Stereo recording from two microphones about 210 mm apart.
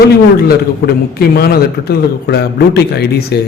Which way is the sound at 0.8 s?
50° left (ahead or behind).